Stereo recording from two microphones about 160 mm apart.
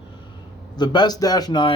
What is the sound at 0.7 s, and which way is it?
Speech, 25° left (ahead or behind).